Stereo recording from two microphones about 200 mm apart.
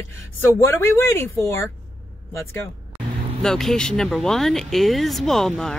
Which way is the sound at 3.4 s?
Centre (ahead or behind).